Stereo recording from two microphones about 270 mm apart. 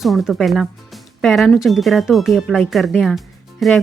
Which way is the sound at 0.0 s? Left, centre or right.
Centre.